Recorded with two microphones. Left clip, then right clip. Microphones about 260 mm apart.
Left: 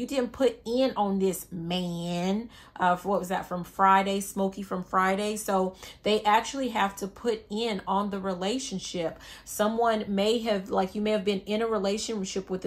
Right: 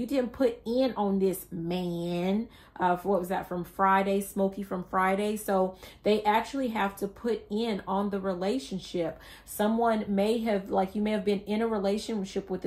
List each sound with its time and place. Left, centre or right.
0.0 s speech: left